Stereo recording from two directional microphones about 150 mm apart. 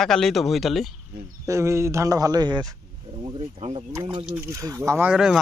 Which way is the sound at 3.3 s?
40° right (ahead or behind).